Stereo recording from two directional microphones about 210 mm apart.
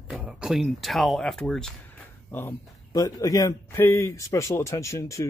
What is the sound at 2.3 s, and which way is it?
A man's voice, 15° left (ahead or behind).